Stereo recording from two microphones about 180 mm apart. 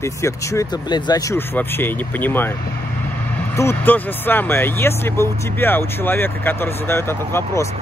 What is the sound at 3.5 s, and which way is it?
Speech, 10° left (ahead or behind).